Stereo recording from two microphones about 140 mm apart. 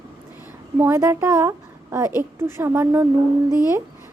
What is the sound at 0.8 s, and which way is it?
A woman's voice, 20° right (ahead or behind).